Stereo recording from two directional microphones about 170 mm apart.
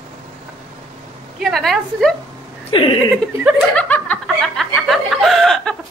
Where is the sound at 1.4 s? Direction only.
Centre (ahead or behind).